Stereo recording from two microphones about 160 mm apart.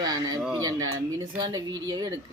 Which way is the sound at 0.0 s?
25° right (ahead or behind).